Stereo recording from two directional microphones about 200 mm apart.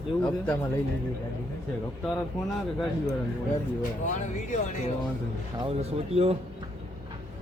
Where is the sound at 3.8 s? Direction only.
40° left (ahead or behind).